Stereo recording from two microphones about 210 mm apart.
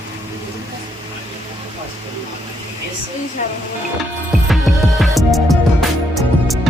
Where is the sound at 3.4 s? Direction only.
35° left (ahead or behind).